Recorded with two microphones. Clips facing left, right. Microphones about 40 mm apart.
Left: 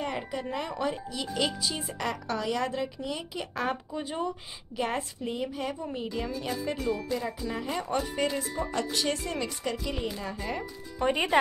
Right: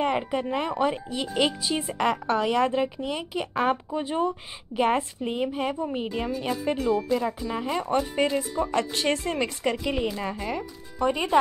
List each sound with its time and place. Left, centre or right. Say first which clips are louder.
0.0 s a woman's voice: right 7 dB; right
8.3 s speech: right 5 dB; centre
8.7 s a woman's voice: right 4 dB; right
11.0 s speech: right 2 dB; left